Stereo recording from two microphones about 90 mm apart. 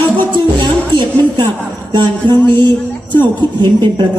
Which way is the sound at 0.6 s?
60° right (ahead or behind).